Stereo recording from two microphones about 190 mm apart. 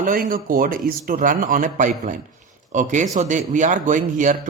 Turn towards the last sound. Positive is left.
turn(degrees=-40)  # may be behind; listen again after turning